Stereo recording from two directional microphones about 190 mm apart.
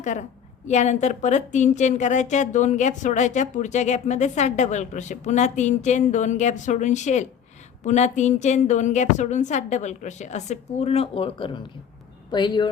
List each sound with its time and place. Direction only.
0.0 s a woman's voice: 40° left (ahead or behind); by 12.7 s 25° left (ahead or behind)